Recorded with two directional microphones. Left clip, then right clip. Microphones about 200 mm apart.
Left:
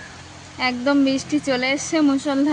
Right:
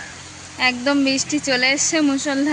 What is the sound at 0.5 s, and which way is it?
Speech, 10° left (ahead or behind).